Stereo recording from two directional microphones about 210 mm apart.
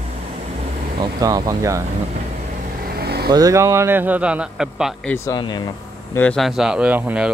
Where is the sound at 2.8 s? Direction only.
50° right (ahead or behind).